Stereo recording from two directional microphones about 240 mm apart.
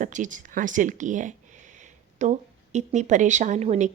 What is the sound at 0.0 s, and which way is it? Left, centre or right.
A woman's voice, right.